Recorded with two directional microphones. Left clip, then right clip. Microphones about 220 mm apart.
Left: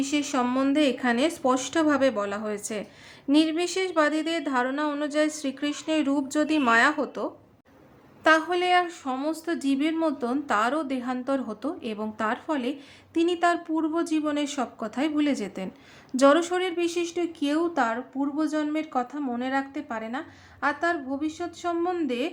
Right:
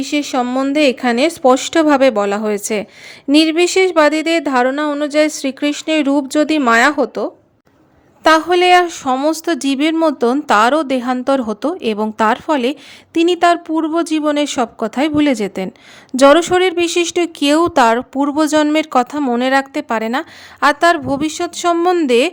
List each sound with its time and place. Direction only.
0.0 s speech: 30° right (ahead or behind); by 22.3 s 50° right (ahead or behind)